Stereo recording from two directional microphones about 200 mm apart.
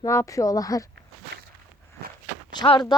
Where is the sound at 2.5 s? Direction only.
25° left (ahead or behind).